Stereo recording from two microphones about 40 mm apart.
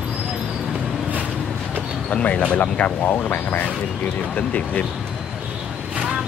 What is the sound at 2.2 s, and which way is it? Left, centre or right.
Speech, left.